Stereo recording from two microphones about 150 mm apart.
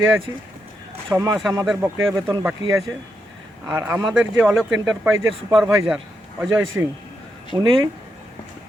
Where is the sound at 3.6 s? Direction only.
15° right (ahead or behind).